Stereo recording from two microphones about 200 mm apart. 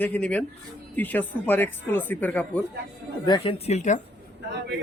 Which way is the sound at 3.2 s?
20° left (ahead or behind).